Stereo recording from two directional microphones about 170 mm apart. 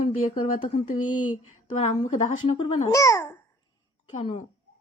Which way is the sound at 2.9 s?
20° left (ahead or behind).